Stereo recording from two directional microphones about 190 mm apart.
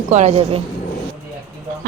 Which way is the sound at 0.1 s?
35° right (ahead or behind).